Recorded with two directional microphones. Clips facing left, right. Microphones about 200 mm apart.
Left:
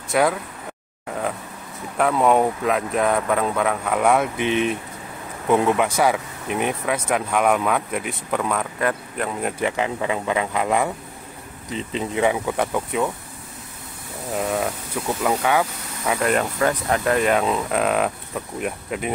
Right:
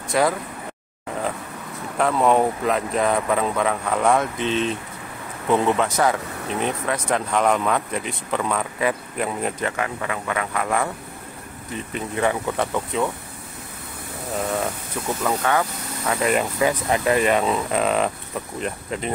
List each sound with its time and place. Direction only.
0.1 s speech: centre (ahead or behind)
2.0 s speech: 5° left (ahead or behind)
9.6 s speech: 15° left (ahead or behind)
15.2 s speech: 15° left (ahead or behind)
16.2 s speech: 5° right (ahead or behind)